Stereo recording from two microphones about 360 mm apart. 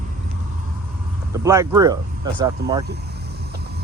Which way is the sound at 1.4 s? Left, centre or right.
Centre.